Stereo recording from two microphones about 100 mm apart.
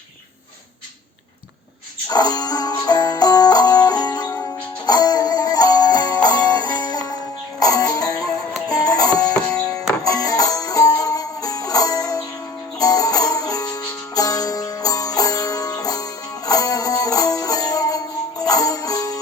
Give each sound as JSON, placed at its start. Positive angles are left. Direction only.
{"t": 2.0, "sound": "music", "side_deg": 40}